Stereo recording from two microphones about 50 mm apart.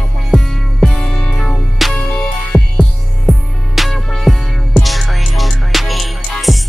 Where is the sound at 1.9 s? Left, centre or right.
Centre.